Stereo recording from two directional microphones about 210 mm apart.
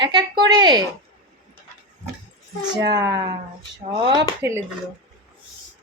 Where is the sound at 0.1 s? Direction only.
20° right (ahead or behind).